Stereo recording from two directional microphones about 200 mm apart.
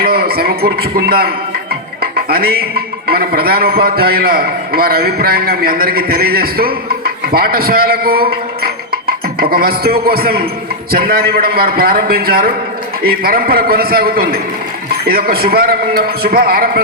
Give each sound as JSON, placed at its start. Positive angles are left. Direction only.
{"t": 0.0, "sound": "a man's voice", "side_deg": -50}